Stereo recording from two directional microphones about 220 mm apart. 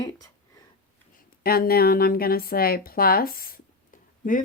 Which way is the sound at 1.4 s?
45° left (ahead or behind).